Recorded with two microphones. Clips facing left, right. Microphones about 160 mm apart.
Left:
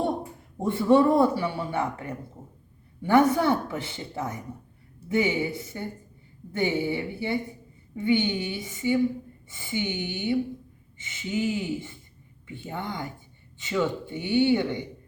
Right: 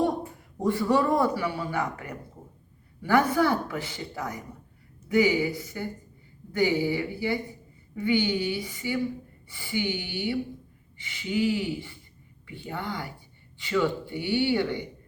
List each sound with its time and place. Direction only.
0.6 s speech: 25° left (ahead or behind)